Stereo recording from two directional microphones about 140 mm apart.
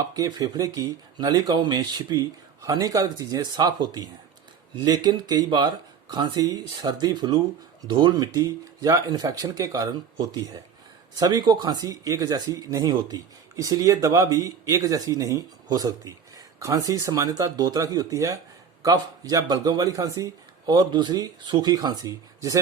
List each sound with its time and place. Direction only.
0.0 s speech: 30° right (ahead or behind)